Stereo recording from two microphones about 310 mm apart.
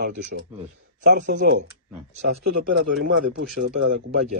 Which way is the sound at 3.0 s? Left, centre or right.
Right.